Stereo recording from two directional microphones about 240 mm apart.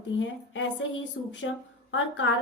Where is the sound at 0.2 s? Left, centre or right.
Left.